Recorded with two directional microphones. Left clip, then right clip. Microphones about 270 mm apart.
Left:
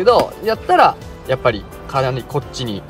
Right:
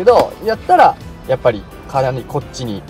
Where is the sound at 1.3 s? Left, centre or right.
Left.